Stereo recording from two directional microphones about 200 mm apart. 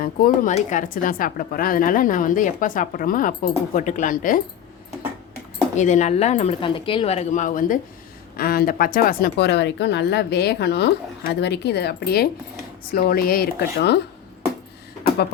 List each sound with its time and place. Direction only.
0.0 s speech: 40° left (ahead or behind)
5.7 s speech: 35° left (ahead or behind); by 14.0 s 55° left (ahead or behind)